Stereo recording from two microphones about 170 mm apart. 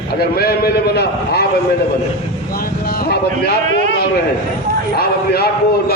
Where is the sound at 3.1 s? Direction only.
70° left (ahead or behind).